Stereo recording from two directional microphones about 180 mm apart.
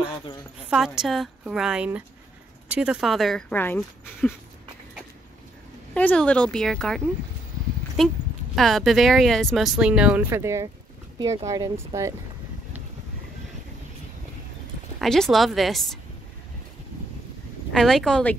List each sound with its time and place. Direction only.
0.7 s speech: centre (ahead or behind)
5.9 s speech: 5° left (ahead or behind)
8.0 s speech: centre (ahead or behind); by 12.1 s 15° right (ahead or behind)
15.0 s speech: centre (ahead or behind)
17.7 s speech: centre (ahead or behind)